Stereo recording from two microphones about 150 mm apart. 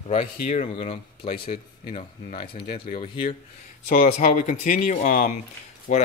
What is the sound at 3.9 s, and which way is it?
Speech, 65° left (ahead or behind).